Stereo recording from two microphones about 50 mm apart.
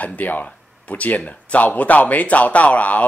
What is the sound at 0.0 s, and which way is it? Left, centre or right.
Speech, left.